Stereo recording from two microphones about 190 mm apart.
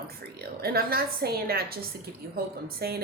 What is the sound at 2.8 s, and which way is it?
Speech, 55° right (ahead or behind).